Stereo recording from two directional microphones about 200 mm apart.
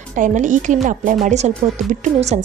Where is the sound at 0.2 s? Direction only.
40° right (ahead or behind).